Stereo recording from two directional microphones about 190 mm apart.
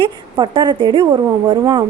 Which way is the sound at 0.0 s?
25° right (ahead or behind).